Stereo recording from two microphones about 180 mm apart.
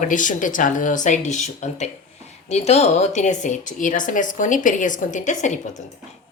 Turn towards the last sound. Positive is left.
turn(degrees=45)  # may be behind; listen again after turning